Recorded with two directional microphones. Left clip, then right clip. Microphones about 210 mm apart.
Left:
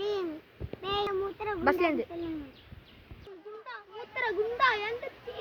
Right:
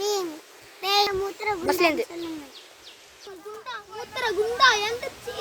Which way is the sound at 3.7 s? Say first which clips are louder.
Right 9 dB; 10° right (ahead or behind).